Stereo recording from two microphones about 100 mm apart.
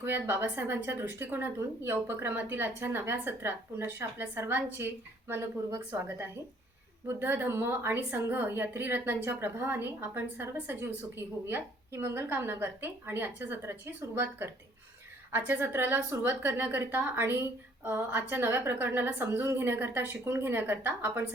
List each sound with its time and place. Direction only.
0.0 s speech: 20° right (ahead or behind)